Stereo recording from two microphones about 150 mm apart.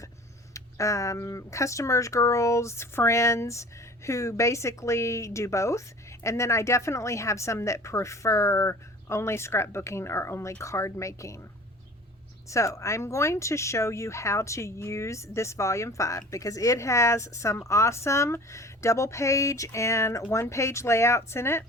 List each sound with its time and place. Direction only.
0.5 s speech: 20° left (ahead or behind)
12.5 s speech: 20° left (ahead or behind)